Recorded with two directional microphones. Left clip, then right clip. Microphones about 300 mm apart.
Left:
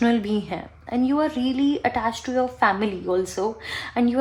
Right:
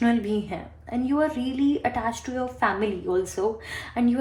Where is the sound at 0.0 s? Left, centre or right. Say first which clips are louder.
Left 2 dB; left.